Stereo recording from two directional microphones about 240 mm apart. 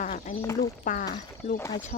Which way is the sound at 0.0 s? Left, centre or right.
Left.